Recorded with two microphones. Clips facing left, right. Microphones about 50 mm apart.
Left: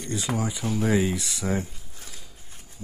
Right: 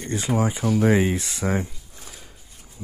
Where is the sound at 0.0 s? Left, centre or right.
Right.